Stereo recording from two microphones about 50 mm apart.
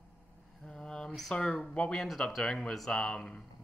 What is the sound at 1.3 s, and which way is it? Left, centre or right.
Speech, centre.